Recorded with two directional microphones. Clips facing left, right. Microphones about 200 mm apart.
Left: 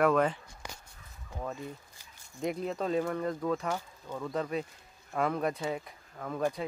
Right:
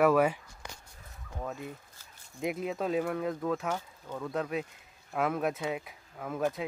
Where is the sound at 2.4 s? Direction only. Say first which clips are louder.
Even; 5° right (ahead or behind).